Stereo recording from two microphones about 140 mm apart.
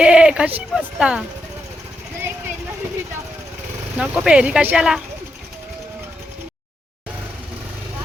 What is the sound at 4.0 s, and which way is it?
Speech, 5° right (ahead or behind).